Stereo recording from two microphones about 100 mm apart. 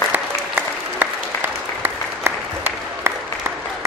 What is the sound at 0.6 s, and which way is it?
Applause, 20° right (ahead or behind).